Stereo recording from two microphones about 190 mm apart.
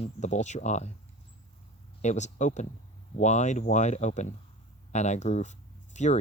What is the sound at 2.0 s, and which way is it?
Speech, 40° left (ahead or behind).